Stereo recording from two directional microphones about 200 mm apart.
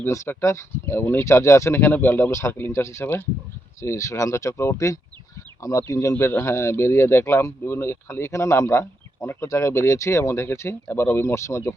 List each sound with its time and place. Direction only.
0.0 s speech: 15° left (ahead or behind)